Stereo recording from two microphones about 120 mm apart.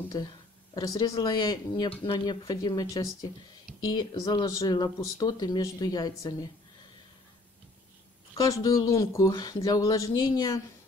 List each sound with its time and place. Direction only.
0.1 s speech: 35° left (ahead or behind)
8.4 s speech: 30° left (ahead or behind)